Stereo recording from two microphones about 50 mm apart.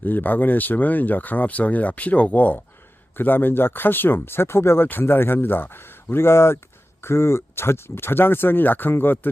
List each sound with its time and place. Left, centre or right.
0.0 s speech: left
4.9 s speech: left